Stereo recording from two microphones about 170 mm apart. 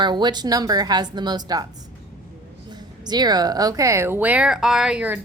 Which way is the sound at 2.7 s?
25° right (ahead or behind).